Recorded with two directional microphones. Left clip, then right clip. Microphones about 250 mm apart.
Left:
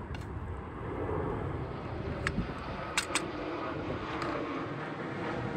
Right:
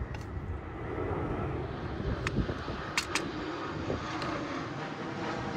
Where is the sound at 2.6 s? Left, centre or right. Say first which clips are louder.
Left 3 dB; centre.